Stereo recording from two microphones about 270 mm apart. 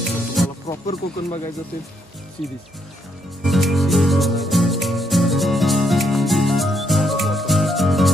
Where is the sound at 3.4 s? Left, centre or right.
Centre.